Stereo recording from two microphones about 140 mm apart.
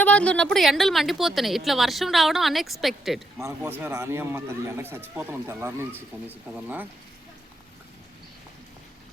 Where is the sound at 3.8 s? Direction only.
20° right (ahead or behind).